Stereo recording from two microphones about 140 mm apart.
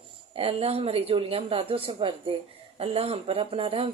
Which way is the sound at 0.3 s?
45° right (ahead or behind).